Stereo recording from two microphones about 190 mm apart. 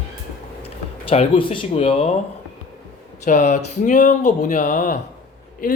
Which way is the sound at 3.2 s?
40° left (ahead or behind).